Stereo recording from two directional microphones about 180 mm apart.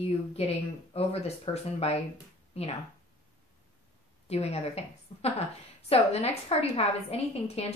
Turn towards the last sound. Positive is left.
turn(degrees=35)  # may be behind; listen again after turning